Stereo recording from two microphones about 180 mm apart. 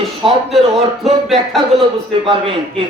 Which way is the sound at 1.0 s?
Centre (ahead or behind).